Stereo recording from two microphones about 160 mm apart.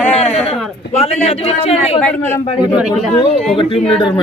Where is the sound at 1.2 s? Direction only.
40° left (ahead or behind).